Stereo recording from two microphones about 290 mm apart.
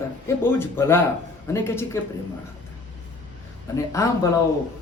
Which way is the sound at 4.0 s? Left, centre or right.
Centre.